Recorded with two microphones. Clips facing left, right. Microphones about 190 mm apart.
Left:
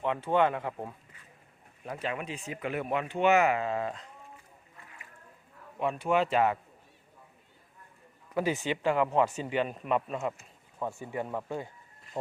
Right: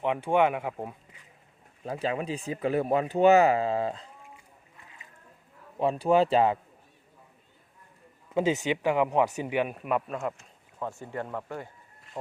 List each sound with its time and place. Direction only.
0.0 s speech: 15° right (ahead or behind)
1.8 s speech: 30° right (ahead or behind)
5.8 s speech: 35° right (ahead or behind)
8.3 s speech: 20° right (ahead or behind); by 11.7 s 15° left (ahead or behind)
12.1 s speech: centre (ahead or behind)